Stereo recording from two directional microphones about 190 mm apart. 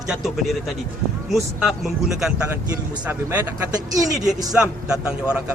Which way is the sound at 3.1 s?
15° right (ahead or behind).